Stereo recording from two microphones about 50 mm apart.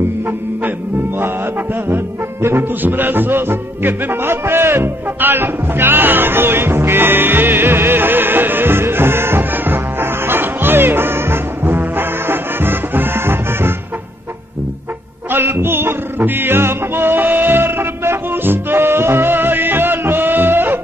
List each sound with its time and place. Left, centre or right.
0.6 s music: right
15.2 s music: right